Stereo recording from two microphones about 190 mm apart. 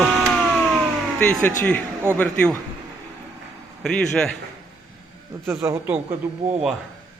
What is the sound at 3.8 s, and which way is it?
Speech, 5° left (ahead or behind).